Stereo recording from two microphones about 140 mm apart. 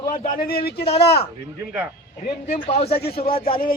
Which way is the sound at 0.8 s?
45° left (ahead or behind).